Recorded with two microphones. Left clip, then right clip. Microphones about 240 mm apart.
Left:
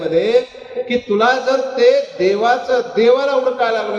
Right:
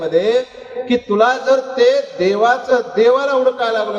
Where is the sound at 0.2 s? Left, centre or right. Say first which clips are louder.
Left 1 dB; right.